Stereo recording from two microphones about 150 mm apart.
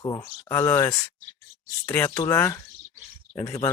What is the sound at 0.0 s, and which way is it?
Speech, 25° left (ahead or behind).